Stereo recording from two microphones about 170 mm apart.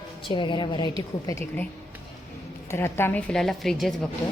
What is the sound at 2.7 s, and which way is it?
A woman's voice, 15° left (ahead or behind).